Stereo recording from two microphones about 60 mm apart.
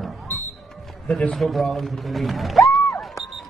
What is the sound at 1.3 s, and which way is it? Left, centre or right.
A woman's voice, centre.